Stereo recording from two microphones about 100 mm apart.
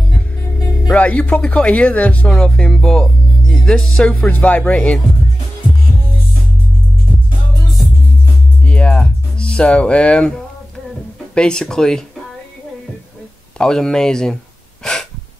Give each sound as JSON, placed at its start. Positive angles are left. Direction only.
{"t": 0.9, "sound": "speech", "side_deg": 15}
{"t": 8.6, "sound": "music", "side_deg": 10}
{"t": 11.3, "sound": "speech", "side_deg": 10}
{"t": 13.6, "sound": "speech", "side_deg": 5}